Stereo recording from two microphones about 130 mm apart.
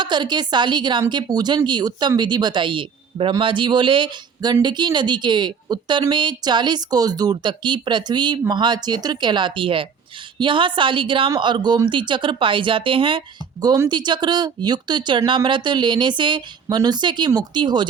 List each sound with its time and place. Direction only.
0.0 s speech: 35° right (ahead or behind)